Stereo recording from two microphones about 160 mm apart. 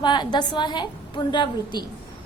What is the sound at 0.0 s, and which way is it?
A woman's voice, 30° left (ahead or behind).